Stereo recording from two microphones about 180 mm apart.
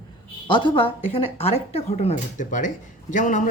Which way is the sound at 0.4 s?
25° left (ahead or behind).